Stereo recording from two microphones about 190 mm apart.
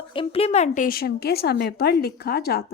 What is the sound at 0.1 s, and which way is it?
A woman's voice, 30° left (ahead or behind).